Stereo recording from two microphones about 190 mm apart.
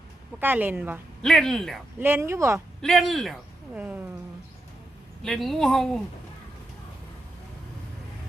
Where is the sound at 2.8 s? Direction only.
Centre (ahead or behind).